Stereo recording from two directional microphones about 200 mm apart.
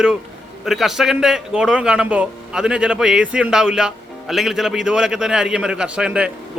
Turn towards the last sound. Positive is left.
turn(degrees=-5)  # may be behind; listen again after turning